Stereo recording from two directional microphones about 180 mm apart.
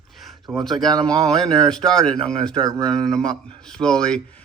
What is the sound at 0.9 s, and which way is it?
Speech, 20° right (ahead or behind).